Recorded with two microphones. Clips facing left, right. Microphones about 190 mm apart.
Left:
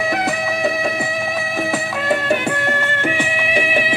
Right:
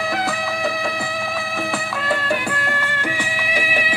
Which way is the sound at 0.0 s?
20° left (ahead or behind).